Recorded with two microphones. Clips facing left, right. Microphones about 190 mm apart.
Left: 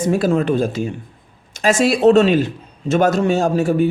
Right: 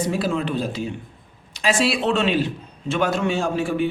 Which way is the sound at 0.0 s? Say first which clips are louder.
Left 6 dB; 45° left (ahead or behind).